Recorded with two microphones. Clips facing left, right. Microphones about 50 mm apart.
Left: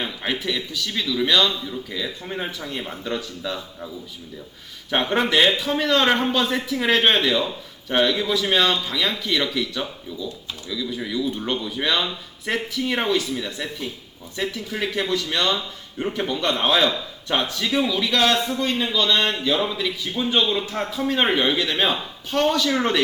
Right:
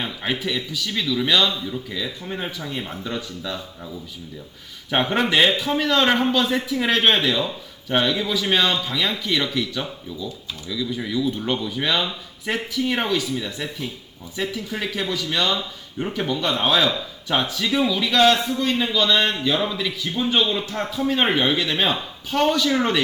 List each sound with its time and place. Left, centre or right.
0.0 s a man's voice: centre
1.9 s a man's voice: centre
4.9 s a man's voice: centre